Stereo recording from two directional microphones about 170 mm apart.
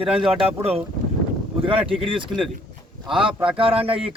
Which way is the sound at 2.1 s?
30° right (ahead or behind).